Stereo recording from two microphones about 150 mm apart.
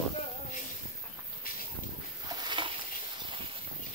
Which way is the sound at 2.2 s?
25° right (ahead or behind).